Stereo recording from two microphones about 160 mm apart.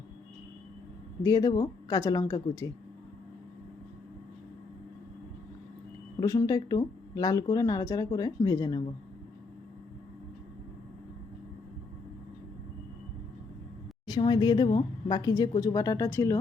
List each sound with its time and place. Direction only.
1.2 s speech: 25° left (ahead or behind)
6.1 s speech: 20° left (ahead or behind)
14.1 s speech: 30° left (ahead or behind)